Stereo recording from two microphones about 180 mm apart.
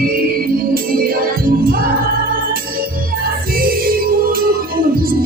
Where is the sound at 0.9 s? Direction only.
55° right (ahead or behind).